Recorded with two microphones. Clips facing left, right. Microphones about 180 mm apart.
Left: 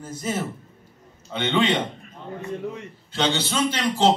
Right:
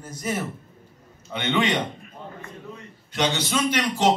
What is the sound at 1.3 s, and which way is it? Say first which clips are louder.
Speech: left 2 dB; 10° right (ahead or behind).